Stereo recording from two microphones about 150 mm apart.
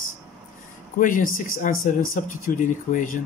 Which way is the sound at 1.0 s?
60° left (ahead or behind).